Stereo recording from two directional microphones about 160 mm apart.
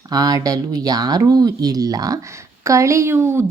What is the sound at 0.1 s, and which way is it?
Speech, 25° right (ahead or behind).